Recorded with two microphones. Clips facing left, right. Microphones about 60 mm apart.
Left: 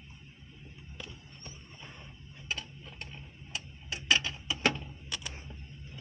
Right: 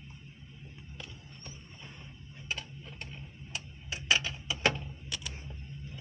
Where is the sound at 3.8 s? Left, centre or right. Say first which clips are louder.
Left 1 dB; centre.